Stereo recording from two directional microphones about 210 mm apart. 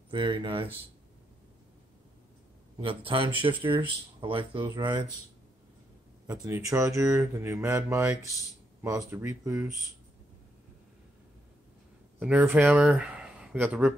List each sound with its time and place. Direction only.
0.1 s speech: 20° right (ahead or behind)
2.8 s speech: 25° right (ahead or behind)
6.2 s speech: 15° right (ahead or behind)
12.2 s speech: 5° right (ahead or behind)